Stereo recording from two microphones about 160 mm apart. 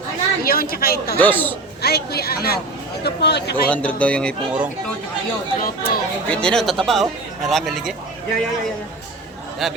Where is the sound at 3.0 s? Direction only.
90° left.